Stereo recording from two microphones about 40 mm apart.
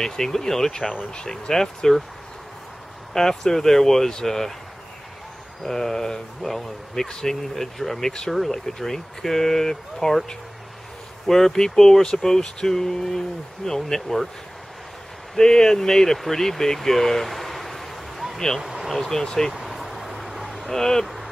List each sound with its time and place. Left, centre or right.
0.0 s speech: centre
3.1 s speech: centre
5.6 s speech: centre
7.1 s speech: centre
7.5 s speech: centre
11.2 s speech: centre
15.3 s speech: centre
18.6 s vehicle: centre
18.9 s speech: centre
19.5 s vehicle: centre
20.7 s speech: centre
21.0 s a sound: centre